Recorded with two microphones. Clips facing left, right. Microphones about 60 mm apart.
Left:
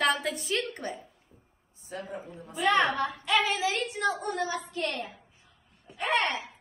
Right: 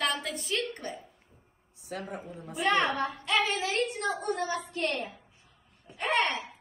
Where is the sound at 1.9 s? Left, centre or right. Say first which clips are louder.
Even; right.